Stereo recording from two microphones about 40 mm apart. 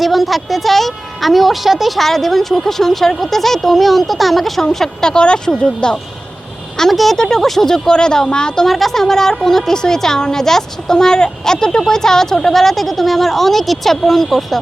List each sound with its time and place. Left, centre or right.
0.0 s a woman's voice: centre
5.0 s speech: left
6.9 s speech: centre
7.2 s a woman's voice: centre
7.9 s speech: centre
8.6 s a woman's voice: centre